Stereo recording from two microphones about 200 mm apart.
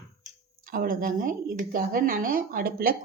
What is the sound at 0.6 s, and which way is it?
A woman's voice, 45° right (ahead or behind).